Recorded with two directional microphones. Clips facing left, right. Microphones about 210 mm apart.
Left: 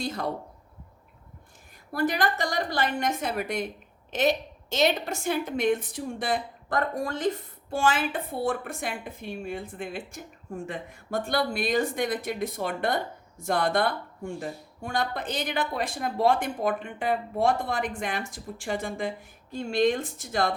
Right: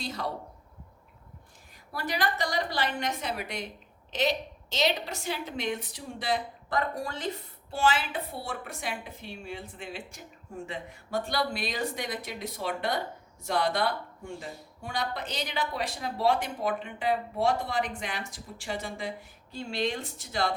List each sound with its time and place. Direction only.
0.0 s a woman's voice: 50° left (ahead or behind)
1.9 s a woman's voice: 50° left (ahead or behind)